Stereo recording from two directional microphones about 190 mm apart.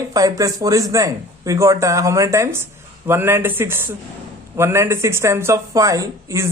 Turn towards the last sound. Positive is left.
turn(degrees=-15)  # may be behind; listen again after turning